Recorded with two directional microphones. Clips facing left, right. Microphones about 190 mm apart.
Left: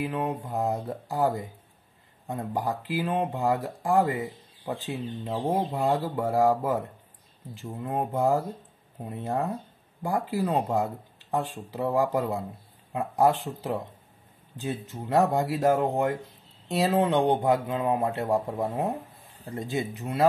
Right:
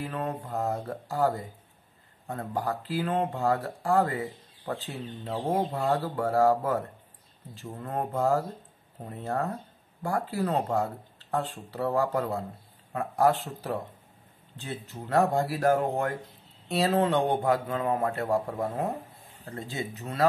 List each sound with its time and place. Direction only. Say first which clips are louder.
0.0 s speech: left 3 dB; 15° left (ahead or behind)